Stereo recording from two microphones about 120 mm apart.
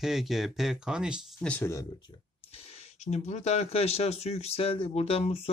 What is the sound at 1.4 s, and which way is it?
Speech, 10° left (ahead or behind).